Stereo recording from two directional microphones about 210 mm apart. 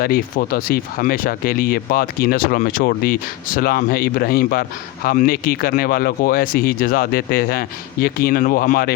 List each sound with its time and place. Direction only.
0.0 s speech: 45° left (ahead or behind)